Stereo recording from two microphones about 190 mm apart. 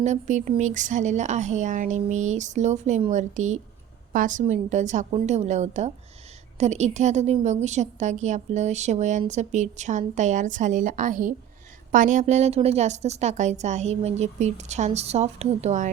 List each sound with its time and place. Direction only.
0.0 s a woman's voice: 40° right (ahead or behind)